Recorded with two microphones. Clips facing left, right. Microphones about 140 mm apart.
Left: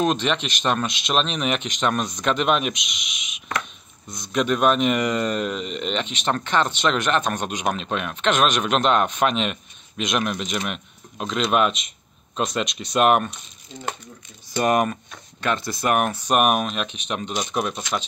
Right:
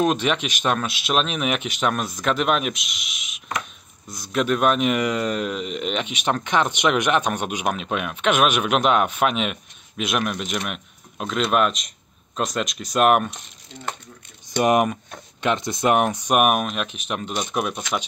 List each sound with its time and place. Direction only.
0.0 s a man's voice: 5° right (ahead or behind)
14.6 s a man's voice: 15° right (ahead or behind)